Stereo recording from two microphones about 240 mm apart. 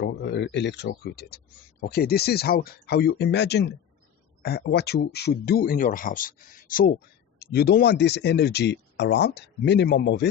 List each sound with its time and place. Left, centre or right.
0.0 s speech: left